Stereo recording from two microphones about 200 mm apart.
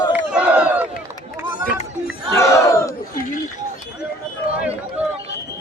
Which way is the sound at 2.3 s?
15° left (ahead or behind).